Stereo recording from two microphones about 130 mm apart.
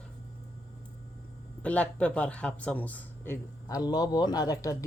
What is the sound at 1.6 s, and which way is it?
Speech, 10° left (ahead or behind).